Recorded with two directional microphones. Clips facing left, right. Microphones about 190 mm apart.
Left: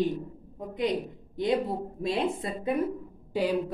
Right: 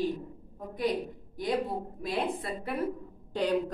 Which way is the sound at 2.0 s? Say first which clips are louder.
Left 4 dB; 25° left (ahead or behind).